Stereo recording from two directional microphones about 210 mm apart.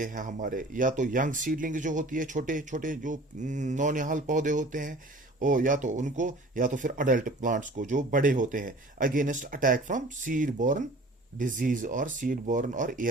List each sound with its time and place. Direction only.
0.0 s speech: 40° right (ahead or behind)